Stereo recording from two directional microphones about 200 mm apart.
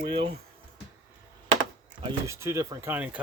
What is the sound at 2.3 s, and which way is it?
Speech, 15° right (ahead or behind).